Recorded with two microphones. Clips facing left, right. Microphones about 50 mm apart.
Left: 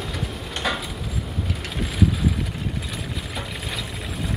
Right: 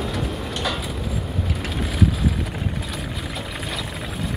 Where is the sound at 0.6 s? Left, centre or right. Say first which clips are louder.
Left 2 dB; left.